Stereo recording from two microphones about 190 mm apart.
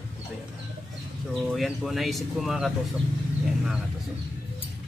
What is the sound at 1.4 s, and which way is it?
Speech, centre (ahead or behind).